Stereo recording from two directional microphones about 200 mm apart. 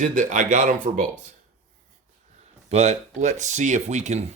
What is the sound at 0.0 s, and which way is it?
Speech, 40° right (ahead or behind).